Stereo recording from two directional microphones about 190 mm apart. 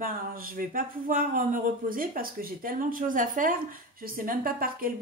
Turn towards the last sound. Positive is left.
turn(degrees=-50)  # may be behind; listen again after turning